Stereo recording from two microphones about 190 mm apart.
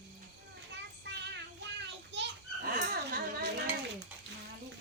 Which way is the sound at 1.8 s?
65° right (ahead or behind).